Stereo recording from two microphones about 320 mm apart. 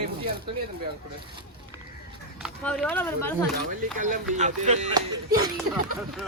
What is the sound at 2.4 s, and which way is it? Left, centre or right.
Speech, centre.